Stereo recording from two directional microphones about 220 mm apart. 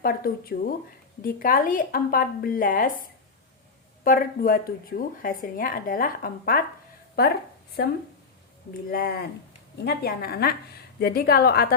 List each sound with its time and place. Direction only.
0.0 s speech: 40° left (ahead or behind)
4.0 s speech: 40° left (ahead or behind)
8.9 s a woman's voice: 40° left (ahead or behind)